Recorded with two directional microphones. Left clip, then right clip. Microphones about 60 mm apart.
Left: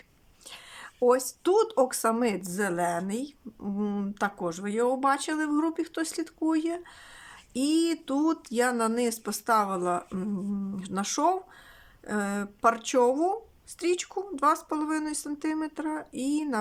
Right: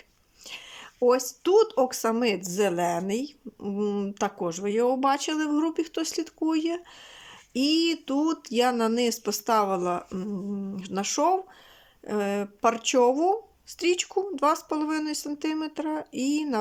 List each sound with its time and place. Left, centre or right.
0.4 s whispering: centre
1.0 s speech: centre; by 3.3 s right
3.6 s speech: centre